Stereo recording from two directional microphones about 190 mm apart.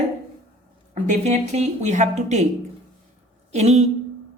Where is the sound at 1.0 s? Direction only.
40° right (ahead or behind).